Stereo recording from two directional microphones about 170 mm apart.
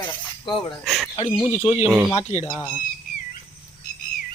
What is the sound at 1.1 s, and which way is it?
Speech, 35° left (ahead or behind).